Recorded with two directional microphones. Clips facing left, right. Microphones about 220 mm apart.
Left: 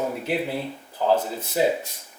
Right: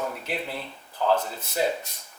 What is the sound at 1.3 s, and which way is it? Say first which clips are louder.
Speech: left 4 dB; 10° left (ahead or behind).